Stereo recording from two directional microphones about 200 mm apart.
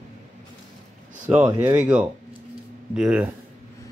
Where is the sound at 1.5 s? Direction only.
15° right (ahead or behind).